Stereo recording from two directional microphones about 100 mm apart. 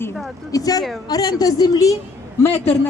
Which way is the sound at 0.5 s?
40° left (ahead or behind).